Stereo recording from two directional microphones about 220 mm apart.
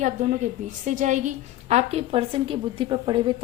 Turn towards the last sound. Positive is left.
turn(degrees=-20)  # may be behind; listen again after turning